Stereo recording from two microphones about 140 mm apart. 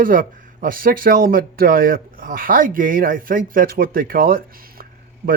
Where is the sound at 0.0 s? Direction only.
75° right (ahead or behind).